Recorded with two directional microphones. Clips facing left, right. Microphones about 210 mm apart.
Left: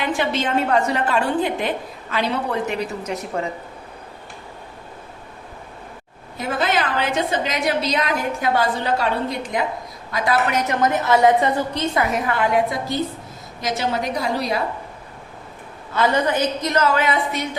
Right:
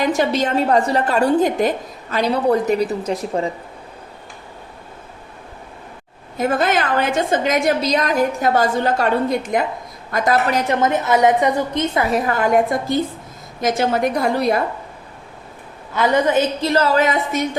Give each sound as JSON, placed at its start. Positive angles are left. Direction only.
{"t": 0.0, "sound": "a woman's voice", "side_deg": -40}
{"t": 6.3, "sound": "a woman's voice", "side_deg": -50}
{"t": 10.5, "sound": "a woman's voice", "side_deg": -25}
{"t": 16.0, "sound": "a woman's voice", "side_deg": -20}